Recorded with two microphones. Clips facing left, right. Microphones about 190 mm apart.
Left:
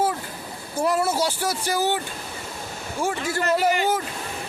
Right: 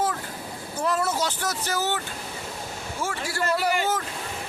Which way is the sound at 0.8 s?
10° left (ahead or behind).